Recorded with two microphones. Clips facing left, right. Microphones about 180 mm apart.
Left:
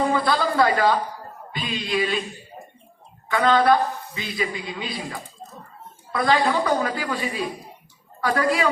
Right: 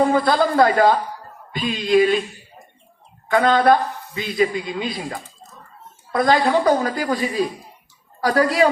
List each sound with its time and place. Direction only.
0.1 s a woman's voice: 40° right (ahead or behind)
3.2 s a woman's voice: 45° right (ahead or behind)
6.1 s a woman's voice: 45° right (ahead or behind)